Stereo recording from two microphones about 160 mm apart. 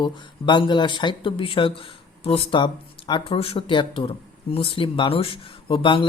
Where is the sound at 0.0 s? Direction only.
30° left (ahead or behind).